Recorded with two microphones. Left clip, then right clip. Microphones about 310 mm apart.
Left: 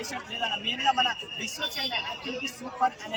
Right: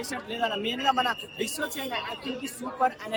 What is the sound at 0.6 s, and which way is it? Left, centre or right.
Speech, centre.